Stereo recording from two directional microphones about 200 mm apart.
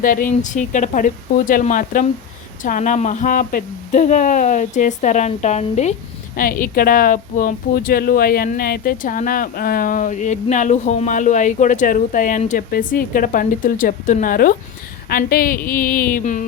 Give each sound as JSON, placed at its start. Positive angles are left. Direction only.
{"t": 0.0, "sound": "speech", "side_deg": 45}
{"t": 6.3, "sound": "a woman's voice", "side_deg": 45}